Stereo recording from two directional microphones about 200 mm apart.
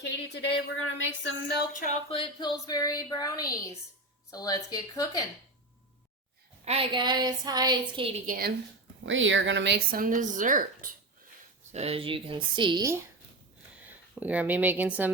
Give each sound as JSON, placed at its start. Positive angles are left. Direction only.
{"t": 0.0, "sound": "speech", "side_deg": 60}
{"t": 1.7, "sound": "a sound", "side_deg": 40}
{"t": 6.7, "sound": "a woman's voice", "side_deg": -25}
{"t": 8.3, "sound": "speech", "side_deg": -50}
{"t": 9.0, "sound": "speech", "side_deg": -70}
{"t": 11.7, "sound": "a woman's voice", "side_deg": -30}
{"t": 13.8, "sound": "speech", "side_deg": -10}